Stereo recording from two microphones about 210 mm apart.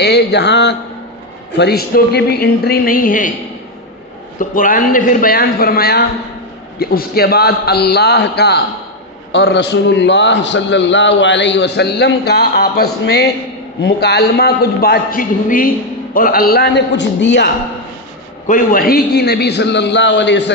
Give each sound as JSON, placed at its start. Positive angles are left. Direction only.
{"t": 0.0, "sound": "a man's voice", "side_deg": 55}
{"t": 4.4, "sound": "a man's voice", "side_deg": 40}
{"t": 18.5, "sound": "a man's voice", "side_deg": 45}